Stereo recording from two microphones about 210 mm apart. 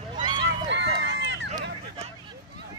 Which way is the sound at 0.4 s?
55° right (ahead or behind).